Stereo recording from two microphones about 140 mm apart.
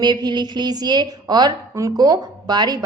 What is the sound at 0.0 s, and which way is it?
A woman's voice, 30° right (ahead or behind).